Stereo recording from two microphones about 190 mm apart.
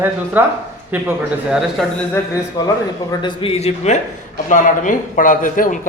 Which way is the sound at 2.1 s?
15° left (ahead or behind).